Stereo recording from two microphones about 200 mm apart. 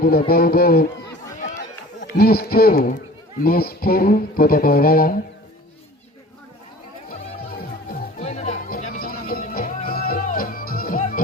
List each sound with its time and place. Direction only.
0.3 s speech: 50° left (ahead or behind)
2.0 s speech: 50° left (ahead or behind)
7.5 s music: 50° left (ahead or behind)
8.2 s music: 35° left (ahead or behind)